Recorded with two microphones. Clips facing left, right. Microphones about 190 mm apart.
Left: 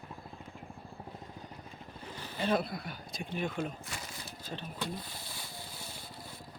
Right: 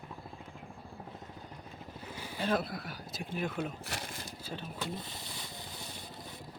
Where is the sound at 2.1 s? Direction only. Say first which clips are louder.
Even; 10° right (ahead or behind).